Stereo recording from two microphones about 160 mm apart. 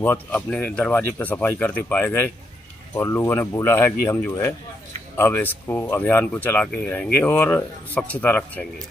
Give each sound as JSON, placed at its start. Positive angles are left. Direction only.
{"t": 0.0, "sound": "speech", "side_deg": 10}